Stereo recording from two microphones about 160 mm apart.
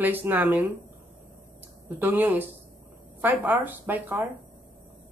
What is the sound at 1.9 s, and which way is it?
Speech, 10° right (ahead or behind).